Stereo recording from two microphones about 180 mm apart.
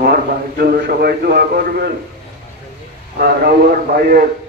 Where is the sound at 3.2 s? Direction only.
55° right (ahead or behind).